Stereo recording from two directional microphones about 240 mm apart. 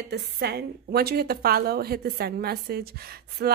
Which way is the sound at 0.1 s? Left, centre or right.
Right.